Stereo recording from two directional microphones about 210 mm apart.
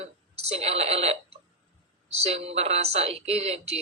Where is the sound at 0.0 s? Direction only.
30° right (ahead or behind).